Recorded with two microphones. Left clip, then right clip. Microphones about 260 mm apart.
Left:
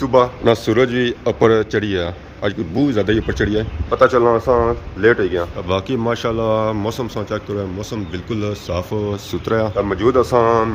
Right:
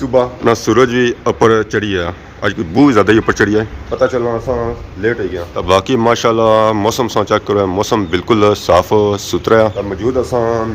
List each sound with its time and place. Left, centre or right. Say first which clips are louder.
0.0 s speech: right 1 dB; centre
3.9 s a man's voice: left 2 dB; centre
5.6 s speech: right 12 dB; centre
9.7 s speech: left 1 dB; centre